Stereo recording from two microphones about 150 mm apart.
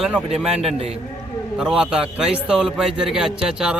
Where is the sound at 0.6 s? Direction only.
40° right (ahead or behind).